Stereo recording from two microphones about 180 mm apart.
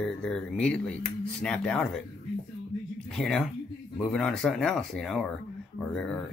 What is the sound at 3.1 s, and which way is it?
Speech, centre (ahead or behind).